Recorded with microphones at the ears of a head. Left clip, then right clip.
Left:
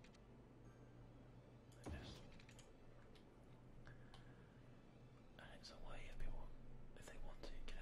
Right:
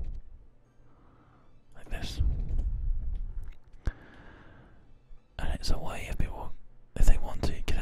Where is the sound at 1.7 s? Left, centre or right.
Right.